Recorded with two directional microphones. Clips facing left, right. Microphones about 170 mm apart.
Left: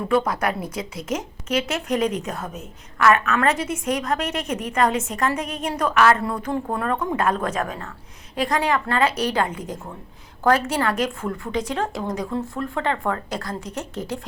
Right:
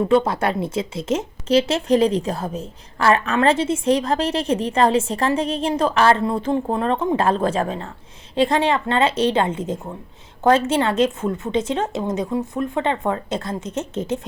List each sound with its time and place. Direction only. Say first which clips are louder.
0.1 s a woman's voice: right 3 dB; 25° right (ahead or behind)